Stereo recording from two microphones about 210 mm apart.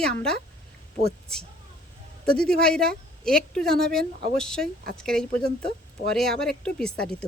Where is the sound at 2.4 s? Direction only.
5° left (ahead or behind).